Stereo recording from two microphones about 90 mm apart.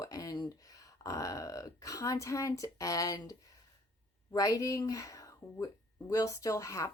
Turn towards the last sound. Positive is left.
turn(degrees=35)  # may be behind; listen again after turning